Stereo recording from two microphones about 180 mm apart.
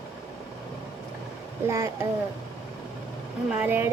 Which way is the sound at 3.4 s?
10° right (ahead or behind).